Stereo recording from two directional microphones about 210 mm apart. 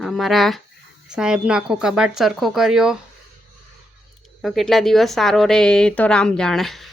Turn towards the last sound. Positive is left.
turn(degrees=0)  # may be behind; listen again after turning